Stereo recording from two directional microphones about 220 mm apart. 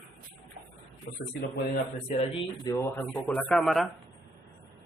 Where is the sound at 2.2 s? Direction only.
25° left (ahead or behind).